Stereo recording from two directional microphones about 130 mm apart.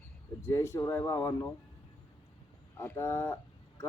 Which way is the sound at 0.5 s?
20° left (ahead or behind).